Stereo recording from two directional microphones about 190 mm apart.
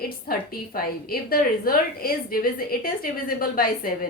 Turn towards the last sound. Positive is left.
turn(degrees=50)  # may be behind; listen again after turning